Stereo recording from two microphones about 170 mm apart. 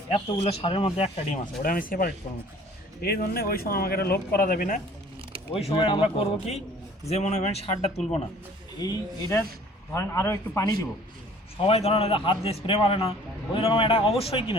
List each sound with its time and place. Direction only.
0.1 s a man's voice: 30° left (ahead or behind)
1.6 s speech: 55° left (ahead or behind)
5.5 s a man's voice: 35° left (ahead or behind)
8.8 s speech: 20° left (ahead or behind)
11.6 s a man's voice: 35° left (ahead or behind)